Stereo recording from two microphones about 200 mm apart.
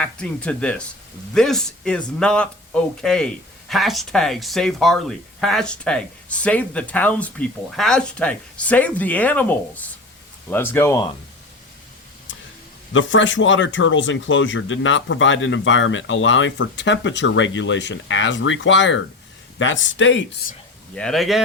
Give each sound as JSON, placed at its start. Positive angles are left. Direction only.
{"t": 0.0, "sound": "speech", "side_deg": 5}
{"t": 12.3, "sound": "a sound", "side_deg": 70}
{"t": 12.9, "sound": "speech", "side_deg": 70}
{"t": 20.9, "sound": "speech", "side_deg": 5}